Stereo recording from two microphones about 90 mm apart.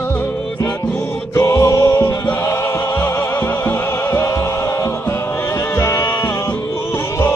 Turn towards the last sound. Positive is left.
turn(degrees=30)  # may be behind; listen again after turning